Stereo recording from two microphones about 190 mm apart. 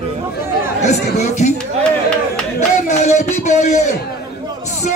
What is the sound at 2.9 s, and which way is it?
Speech, 35° left (ahead or behind).